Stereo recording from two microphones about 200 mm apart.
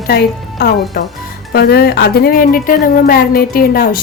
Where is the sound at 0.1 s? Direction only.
50° left (ahead or behind).